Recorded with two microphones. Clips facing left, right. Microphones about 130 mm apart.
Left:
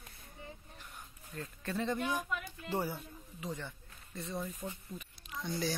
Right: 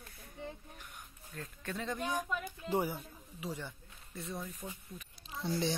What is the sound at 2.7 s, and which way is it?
A man's voice, 15° right (ahead or behind).